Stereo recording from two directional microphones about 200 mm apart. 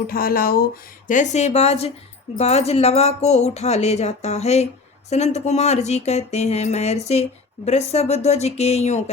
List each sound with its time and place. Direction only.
0.1 s speech: 45° left (ahead or behind)